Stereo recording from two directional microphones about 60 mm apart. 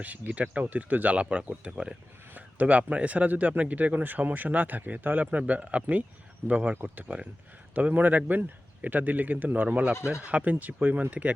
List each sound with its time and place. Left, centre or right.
0.0 s a man's voice: right